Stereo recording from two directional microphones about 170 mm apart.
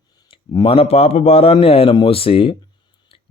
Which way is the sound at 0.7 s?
35° left (ahead or behind).